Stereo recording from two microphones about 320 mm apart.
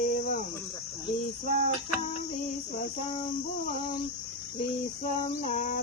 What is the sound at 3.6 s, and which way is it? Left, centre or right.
Female singing, left.